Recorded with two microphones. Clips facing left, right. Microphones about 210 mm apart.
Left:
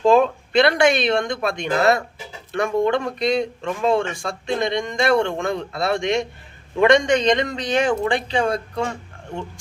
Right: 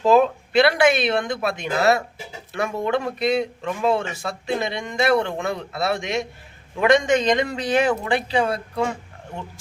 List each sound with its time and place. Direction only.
0.0 s speech: 5° right (ahead or behind)